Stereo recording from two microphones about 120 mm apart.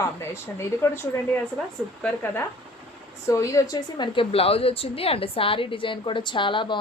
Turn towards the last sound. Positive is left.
turn(degrees=45)  # may be behind; listen again after turning